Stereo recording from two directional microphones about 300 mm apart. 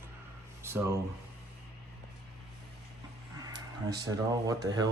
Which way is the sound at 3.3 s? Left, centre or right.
Centre.